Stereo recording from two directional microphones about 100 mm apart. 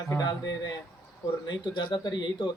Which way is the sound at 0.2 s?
40° left (ahead or behind).